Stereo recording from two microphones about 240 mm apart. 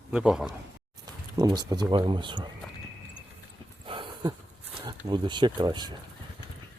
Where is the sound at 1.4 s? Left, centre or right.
Centre.